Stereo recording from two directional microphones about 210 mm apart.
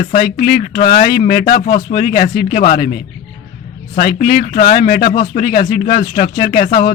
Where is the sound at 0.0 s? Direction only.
45° left (ahead or behind).